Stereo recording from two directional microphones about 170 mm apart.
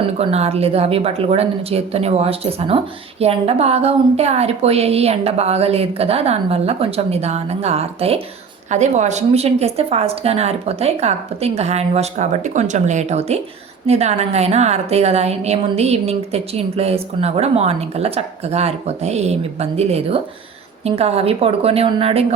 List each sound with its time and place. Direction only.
0.0 s speech: 35° right (ahead or behind)